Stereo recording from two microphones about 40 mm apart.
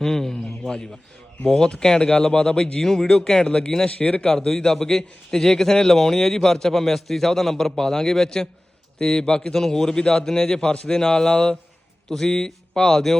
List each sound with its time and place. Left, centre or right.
0.0 s a sound: centre
1.5 s a man's voice: left
3.4 s a man's voice: left
4.3 s a man's voice: centre
10.0 s a man's voice: left
10.2 s a man's voice: centre